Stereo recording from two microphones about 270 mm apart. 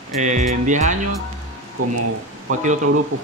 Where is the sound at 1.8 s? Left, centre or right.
Right.